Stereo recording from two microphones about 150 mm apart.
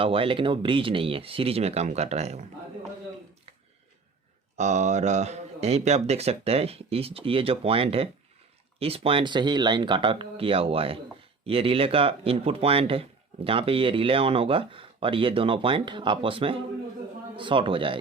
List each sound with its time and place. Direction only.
0.0 s speech: 35° right (ahead or behind)
4.5 s speech: 50° right (ahead or behind); by 18.0 s 35° right (ahead or behind)